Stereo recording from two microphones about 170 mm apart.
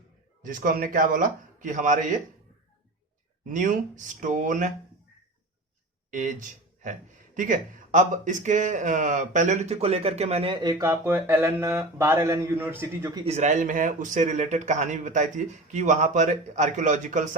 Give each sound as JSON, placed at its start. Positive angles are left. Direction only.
{"t": 0.4, "sound": "a man's voice", "side_deg": -50}
{"t": 3.5, "sound": "a man's voice", "side_deg": -50}
{"t": 6.1, "sound": "a man's voice", "side_deg": -45}
{"t": 13.2, "sound": "a man's voice", "side_deg": -40}